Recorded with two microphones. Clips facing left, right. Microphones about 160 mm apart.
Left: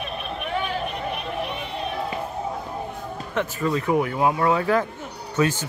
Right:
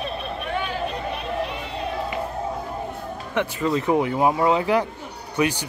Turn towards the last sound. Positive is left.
turn(degrees=-15)  # may be behind; listen again after turning